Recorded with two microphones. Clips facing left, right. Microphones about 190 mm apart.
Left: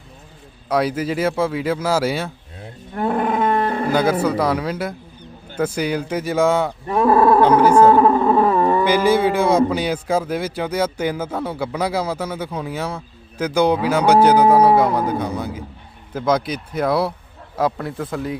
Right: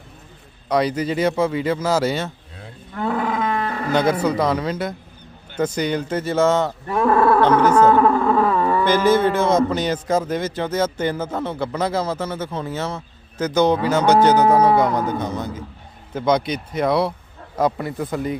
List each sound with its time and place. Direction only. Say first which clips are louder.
0.7 s speech: even; 5° left (ahead or behind)
3.1 s wild animals: left 2 dB; 50° left (ahead or behind)
3.7 s music: left 4 dB; 30° left (ahead or behind)
3.9 s a man's voice: right 1 dB; 5° left (ahead or behind)
6.8 s roaring cats: left 3 dB; 20° left (ahead or behind)
7.4 s a sound: left 2 dB; 10° left (ahead or behind)
8.8 s a man's voice: even; 10° left (ahead or behind)